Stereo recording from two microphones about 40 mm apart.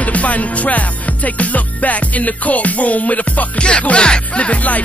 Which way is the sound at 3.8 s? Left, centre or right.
Left.